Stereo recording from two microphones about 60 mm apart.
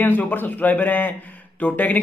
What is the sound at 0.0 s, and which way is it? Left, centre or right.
A man's voice, left.